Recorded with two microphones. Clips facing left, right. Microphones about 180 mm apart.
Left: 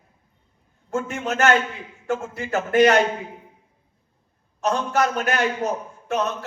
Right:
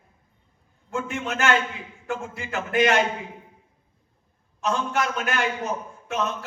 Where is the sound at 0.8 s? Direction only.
40° left (ahead or behind).